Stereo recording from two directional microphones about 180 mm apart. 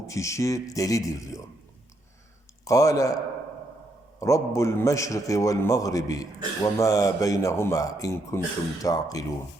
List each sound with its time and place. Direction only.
0.1 s a man's voice: 15° left (ahead or behind)
2.6 s a man's voice: 20° left (ahead or behind)
4.2 s a man's voice: 15° left (ahead or behind)